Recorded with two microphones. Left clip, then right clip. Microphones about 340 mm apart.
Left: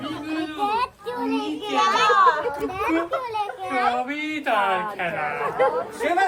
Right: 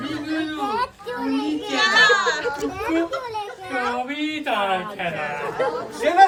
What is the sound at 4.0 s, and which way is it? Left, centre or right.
A man's voice, centre.